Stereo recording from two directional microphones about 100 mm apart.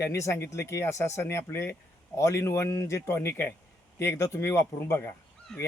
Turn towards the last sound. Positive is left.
turn(degrees=5)  # may be behind; listen again after turning